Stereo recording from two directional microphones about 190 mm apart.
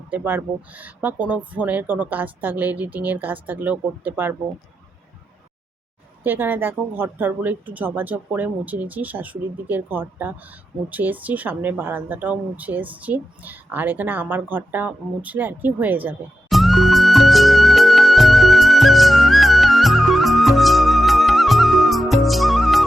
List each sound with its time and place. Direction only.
0.1 s speech: 10° right (ahead or behind)
6.2 s speech: 10° right (ahead or behind)
10.8 s a sound: 10° right (ahead or behind)